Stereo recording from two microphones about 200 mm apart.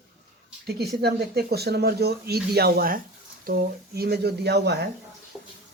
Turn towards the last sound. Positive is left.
turn(degrees=-55)  # may be behind; listen again after turning